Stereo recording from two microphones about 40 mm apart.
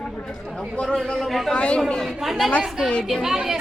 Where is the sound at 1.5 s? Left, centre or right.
Left.